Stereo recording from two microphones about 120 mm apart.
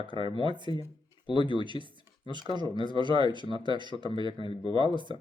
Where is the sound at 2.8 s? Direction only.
40° right (ahead or behind).